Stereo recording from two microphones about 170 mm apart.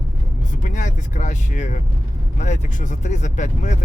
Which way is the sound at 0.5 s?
50° left (ahead or behind).